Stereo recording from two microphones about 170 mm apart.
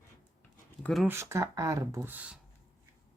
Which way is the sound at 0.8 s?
Centre (ahead or behind).